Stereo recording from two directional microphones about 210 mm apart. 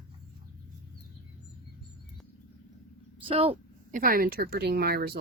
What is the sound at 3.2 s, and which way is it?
Speech, 25° right (ahead or behind).